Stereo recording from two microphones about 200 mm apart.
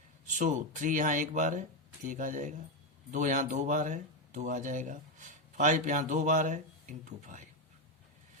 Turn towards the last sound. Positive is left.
turn(degrees=-40)  # may be behind; listen again after turning